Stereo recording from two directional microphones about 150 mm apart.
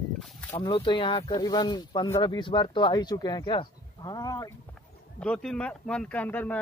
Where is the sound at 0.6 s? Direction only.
30° left (ahead or behind).